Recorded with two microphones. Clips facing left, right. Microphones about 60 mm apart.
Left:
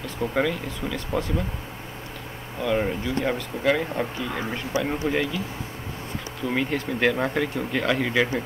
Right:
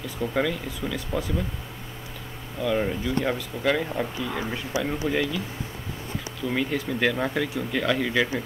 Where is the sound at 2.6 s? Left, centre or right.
Centre.